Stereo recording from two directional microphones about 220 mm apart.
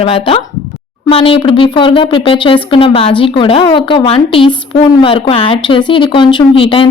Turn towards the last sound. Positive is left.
turn(degrees=25)  # may be behind; listen again after turning